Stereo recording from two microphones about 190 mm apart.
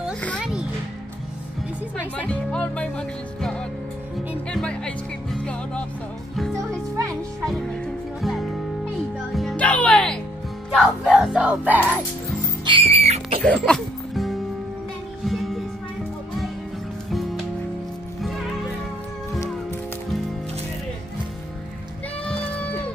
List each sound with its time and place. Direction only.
0.4 s music: 5° right (ahead or behind)
2.0 s music: 5° left (ahead or behind)
6.5 s music: 15° right (ahead or behind)
7.4 s music: centre (ahead or behind)
12.6 s music: 30° right (ahead or behind)
13.4 s music: 5° left (ahead or behind)
22.2 s music: 5° left (ahead or behind)